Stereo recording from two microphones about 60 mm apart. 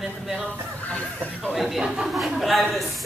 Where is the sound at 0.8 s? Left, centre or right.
Left.